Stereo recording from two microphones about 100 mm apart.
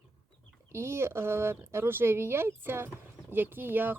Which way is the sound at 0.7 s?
25° right (ahead or behind).